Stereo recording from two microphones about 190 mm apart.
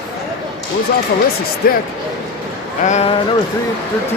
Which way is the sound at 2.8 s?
35° left (ahead or behind).